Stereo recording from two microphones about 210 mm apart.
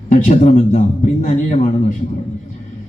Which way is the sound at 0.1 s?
35° left (ahead or behind).